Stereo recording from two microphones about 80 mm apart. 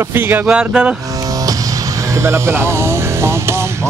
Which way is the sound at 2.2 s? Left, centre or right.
Right.